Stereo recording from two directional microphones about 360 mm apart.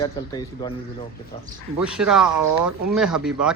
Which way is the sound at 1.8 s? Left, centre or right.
Centre.